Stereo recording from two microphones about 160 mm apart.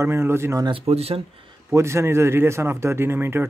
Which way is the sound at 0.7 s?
35° right (ahead or behind).